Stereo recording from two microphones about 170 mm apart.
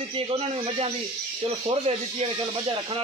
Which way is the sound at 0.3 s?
35° right (ahead or behind).